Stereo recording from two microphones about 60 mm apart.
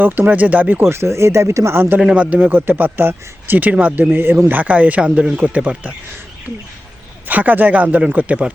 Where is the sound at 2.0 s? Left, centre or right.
Centre.